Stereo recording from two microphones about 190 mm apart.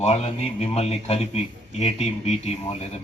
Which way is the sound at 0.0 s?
35° left (ahead or behind).